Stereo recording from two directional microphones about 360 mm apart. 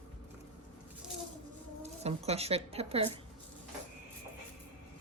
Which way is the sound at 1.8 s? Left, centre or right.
Centre.